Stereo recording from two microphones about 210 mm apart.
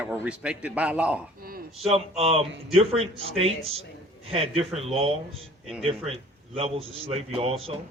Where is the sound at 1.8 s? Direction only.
30° right (ahead or behind).